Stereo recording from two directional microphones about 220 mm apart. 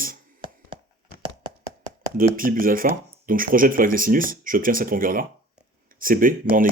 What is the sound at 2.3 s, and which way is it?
Speech, 40° right (ahead or behind).